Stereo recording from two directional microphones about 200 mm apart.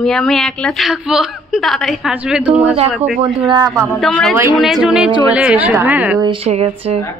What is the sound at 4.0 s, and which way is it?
A woman's voice, centre (ahead or behind).